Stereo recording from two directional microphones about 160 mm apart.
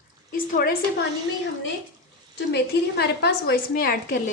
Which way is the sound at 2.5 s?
90° left.